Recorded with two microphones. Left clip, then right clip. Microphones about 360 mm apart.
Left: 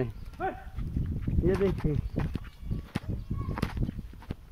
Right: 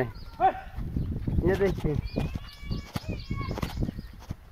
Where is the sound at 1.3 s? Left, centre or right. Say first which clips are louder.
Right 2 dB; right.